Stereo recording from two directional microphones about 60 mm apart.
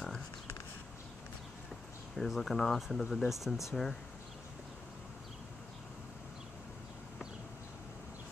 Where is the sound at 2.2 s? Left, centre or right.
Centre.